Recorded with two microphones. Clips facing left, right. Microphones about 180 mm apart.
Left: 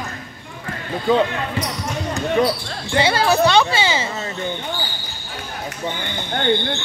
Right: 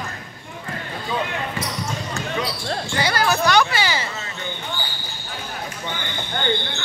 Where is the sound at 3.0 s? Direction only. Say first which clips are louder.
Left 5 dB; 25° left (ahead or behind).